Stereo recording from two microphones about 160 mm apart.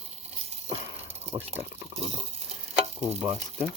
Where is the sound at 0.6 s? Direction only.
40° right (ahead or behind).